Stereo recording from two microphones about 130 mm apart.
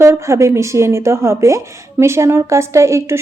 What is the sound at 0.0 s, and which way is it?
A woman's voice, 20° right (ahead or behind).